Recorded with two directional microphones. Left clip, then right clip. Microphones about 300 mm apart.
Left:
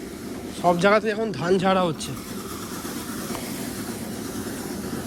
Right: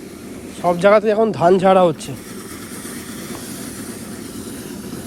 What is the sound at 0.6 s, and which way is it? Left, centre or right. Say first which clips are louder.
Speech: right 6 dB; centre.